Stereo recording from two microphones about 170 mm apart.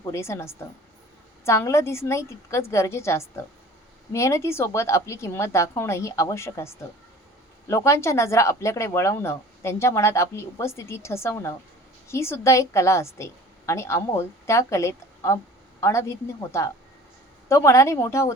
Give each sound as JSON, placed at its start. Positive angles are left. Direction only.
{"t": 0.1, "sound": "a woman's voice", "side_deg": 15}